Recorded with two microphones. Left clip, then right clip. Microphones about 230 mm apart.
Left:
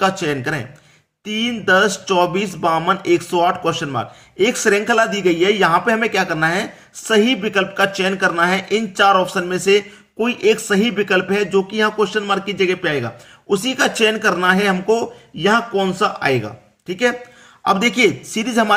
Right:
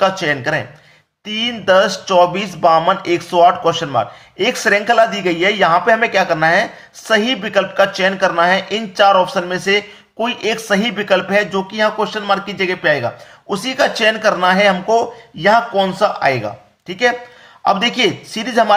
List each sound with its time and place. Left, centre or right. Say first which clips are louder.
0.0 s speech: right 3 dB; centre
18.3 s speech: right 3 dB; centre